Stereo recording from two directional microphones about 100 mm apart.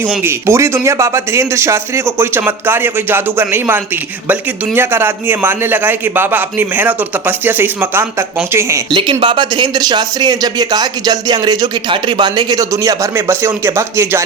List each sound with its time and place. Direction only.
0.2 s a man's voice: 25° right (ahead or behind)
8.9 s speech: 55° right (ahead or behind); by 14.3 s 25° right (ahead or behind)